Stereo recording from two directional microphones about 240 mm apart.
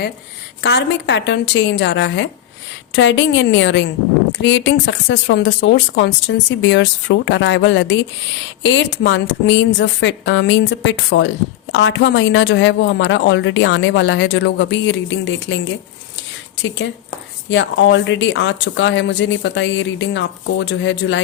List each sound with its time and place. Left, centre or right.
0.6 s speech: left
17.5 s speech: left